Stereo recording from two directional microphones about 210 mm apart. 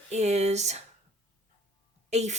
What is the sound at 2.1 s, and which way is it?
Speech, 35° right (ahead or behind).